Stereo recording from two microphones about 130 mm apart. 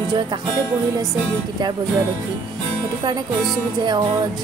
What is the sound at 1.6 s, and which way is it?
Speech, 35° right (ahead or behind).